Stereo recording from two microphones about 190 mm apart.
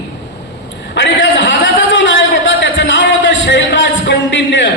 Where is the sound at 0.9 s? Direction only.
70° left (ahead or behind).